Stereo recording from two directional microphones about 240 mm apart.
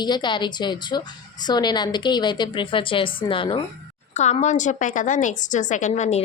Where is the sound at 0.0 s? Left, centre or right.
Centre.